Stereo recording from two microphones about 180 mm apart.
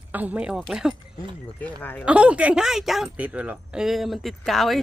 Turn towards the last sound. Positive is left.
turn(degrees=0)  # may be behind; listen again after turning